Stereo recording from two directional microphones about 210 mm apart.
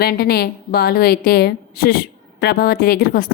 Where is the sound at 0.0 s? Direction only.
45° left (ahead or behind).